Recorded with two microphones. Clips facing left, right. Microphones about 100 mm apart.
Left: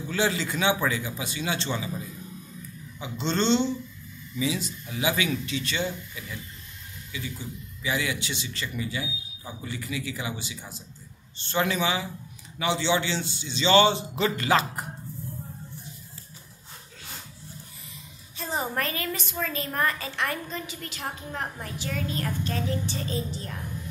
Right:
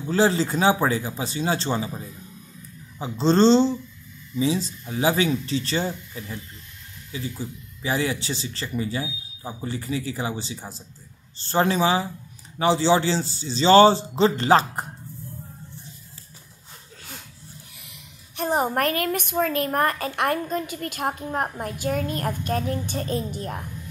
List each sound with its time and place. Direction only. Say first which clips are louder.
0.0 s speech: right 6 dB; 35° right (ahead or behind)
17.8 s a woman's voice: left 1 dB; 65° right (ahead or behind)